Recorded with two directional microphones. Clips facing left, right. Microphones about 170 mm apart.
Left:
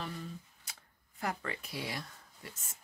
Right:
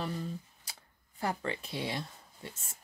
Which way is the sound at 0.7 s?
30° right (ahead or behind).